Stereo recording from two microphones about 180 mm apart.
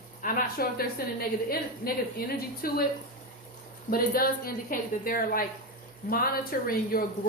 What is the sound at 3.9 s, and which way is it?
A woman's voice, 55° left (ahead or behind).